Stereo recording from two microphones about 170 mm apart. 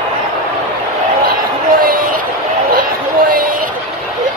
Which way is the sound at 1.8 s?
55° right (ahead or behind).